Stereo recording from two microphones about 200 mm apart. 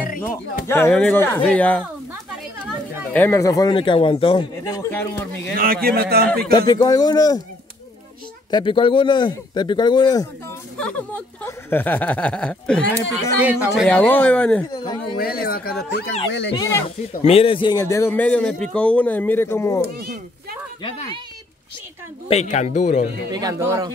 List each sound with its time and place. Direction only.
0.7 s speech: 10° left (ahead or behind)
3.1 s a man's voice: 10° left (ahead or behind)
5.6 s speech: 50° right (ahead or behind)
6.5 s a man's voice: 20° left (ahead or behind)
8.5 s a man's voice: 25° left (ahead or behind)
10.8 s speech: 5° left (ahead or behind)
13.1 s speech: 5° right (ahead or behind)
15.1 s speech: 50° left (ahead or behind)
16.5 s speech: 15° left (ahead or behind)
17.2 s a man's voice: 30° left (ahead or behind)
17.8 s speech: 15° left (ahead or behind)
22.3 s speech: 35° left (ahead or behind)
23.3 s speech: 15° right (ahead or behind)